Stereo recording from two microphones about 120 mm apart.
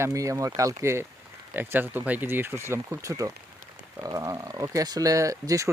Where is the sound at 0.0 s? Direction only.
25° right (ahead or behind).